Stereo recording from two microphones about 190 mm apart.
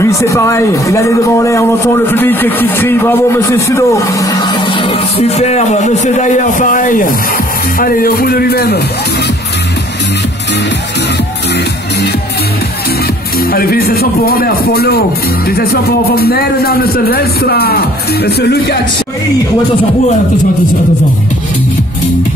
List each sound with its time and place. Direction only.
0.0 s speech: 15° left (ahead or behind); by 8.8 s 55° left (ahead or behind)
13.4 s a man's voice: 55° left (ahead or behind)